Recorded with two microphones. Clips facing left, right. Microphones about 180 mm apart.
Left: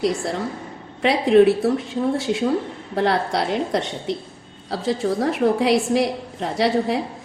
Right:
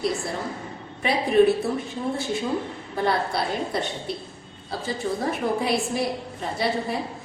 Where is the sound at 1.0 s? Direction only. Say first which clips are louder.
Left 4 dB; 85° left.